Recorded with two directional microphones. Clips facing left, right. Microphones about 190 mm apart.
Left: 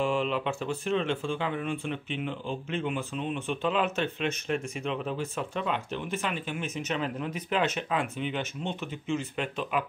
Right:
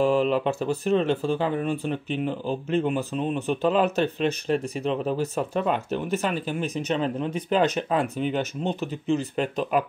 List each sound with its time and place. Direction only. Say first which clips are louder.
0.0 s speech: right 7 dB; 40° right (ahead or behind)